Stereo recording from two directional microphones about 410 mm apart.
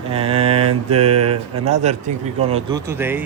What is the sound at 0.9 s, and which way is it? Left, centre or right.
Speech, centre.